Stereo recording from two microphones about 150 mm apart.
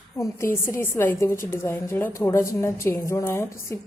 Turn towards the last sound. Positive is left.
turn(degrees=15)  # may be behind; listen again after turning